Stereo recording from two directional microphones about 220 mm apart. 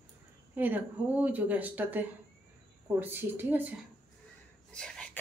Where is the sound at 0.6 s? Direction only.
10° right (ahead or behind).